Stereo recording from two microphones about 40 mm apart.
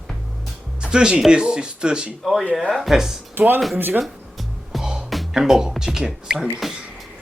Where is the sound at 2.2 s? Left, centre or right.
Centre.